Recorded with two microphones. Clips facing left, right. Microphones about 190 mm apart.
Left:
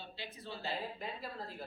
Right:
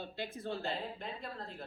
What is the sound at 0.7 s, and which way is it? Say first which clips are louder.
Speech: right 1 dB; 5° left (ahead or behind).